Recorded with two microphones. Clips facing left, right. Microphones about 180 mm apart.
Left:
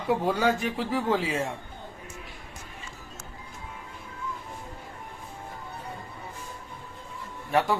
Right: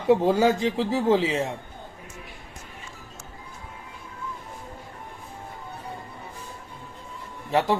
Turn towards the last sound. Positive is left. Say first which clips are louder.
# right 2 dB
turn(degrees=-25)  # may be behind; listen again after turning